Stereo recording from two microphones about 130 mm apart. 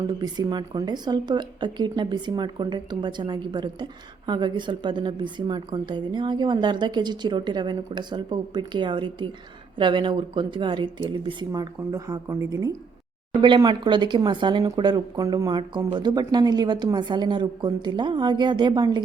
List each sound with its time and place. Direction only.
0.1 s a woman's voice: 30° right (ahead or behind)